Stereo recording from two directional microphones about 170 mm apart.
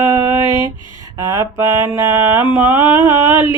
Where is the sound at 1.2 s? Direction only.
15° right (ahead or behind).